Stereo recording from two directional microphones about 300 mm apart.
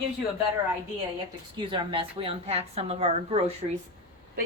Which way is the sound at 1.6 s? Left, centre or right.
Centre.